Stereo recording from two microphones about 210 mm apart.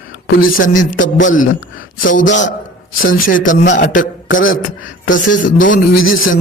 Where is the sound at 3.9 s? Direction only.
70° left (ahead or behind).